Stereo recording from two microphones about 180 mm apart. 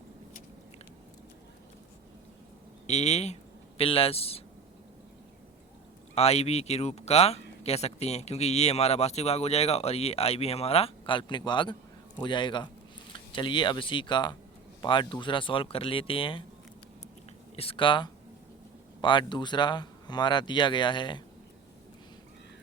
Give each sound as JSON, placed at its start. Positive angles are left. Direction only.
{"t": 2.8, "sound": "speech", "side_deg": 40}
{"t": 6.1, "sound": "speech", "side_deg": 35}
{"t": 17.6, "sound": "speech", "side_deg": 30}